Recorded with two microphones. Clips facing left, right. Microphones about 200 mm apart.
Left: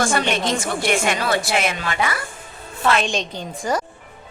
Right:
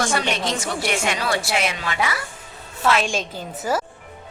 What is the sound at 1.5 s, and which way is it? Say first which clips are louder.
Speech: left 2 dB; 50° left (ahead or behind).